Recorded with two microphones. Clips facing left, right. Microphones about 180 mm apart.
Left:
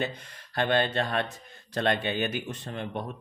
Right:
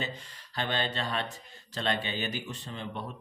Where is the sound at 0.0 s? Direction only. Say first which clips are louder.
Left 5 dB; 55° left (ahead or behind).